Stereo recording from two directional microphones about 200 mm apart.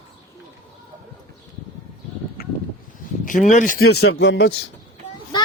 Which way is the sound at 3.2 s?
40° left (ahead or behind).